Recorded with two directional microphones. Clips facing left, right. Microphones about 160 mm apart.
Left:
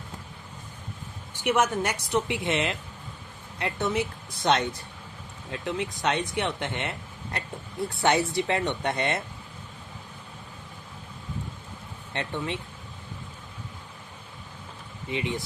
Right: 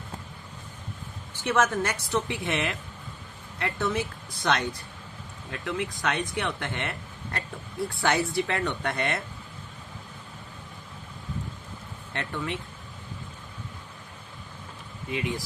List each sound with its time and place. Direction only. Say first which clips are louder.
1.3 s a woman's voice: left 1 dB; 15° left (ahead or behind)
12.1 s speech: left 1 dB; 20° left (ahead or behind)
15.1 s speech: even; 20° left (ahead or behind)